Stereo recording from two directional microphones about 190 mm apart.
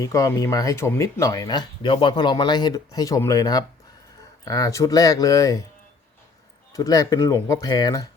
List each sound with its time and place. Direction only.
0.0 s speech: 15° left (ahead or behind)
6.7 s speech: 20° left (ahead or behind)